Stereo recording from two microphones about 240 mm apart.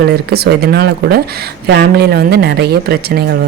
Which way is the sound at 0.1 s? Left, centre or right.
Right.